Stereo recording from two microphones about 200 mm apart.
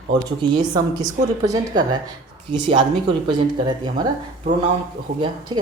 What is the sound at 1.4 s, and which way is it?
Speech, 20° right (ahead or behind).